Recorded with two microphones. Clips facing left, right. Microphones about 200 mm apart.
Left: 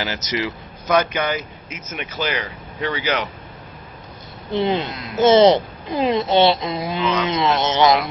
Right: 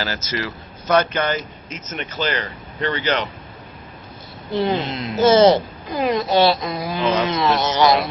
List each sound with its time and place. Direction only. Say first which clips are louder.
0.0 s a man's voice: left 2 dB; 15° left (ahead or behind)
4.5 s a woman's voice: even; 20° left (ahead or behind)
4.8 s speech: right 5 dB; 25° right (ahead or behind)
5.1 s a woman's voice: left 1 dB; 20° left (ahead or behind)